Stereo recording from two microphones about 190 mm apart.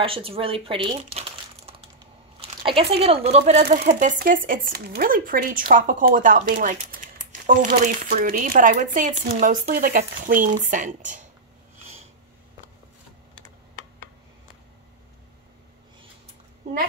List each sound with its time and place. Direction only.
0.0 s speech: 30° right (ahead or behind)
4.2 s speech: 45° right (ahead or behind)